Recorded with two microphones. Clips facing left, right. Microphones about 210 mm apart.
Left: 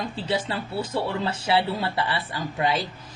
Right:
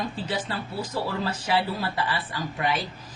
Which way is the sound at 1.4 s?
25° left (ahead or behind).